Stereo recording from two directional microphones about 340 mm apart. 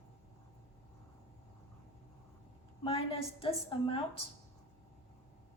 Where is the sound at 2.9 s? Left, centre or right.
Centre.